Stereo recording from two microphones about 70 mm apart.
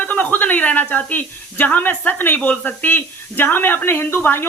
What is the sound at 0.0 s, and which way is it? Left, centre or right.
A woman's voice, left.